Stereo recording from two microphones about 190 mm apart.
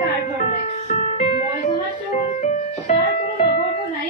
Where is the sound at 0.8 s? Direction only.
35° left (ahead or behind).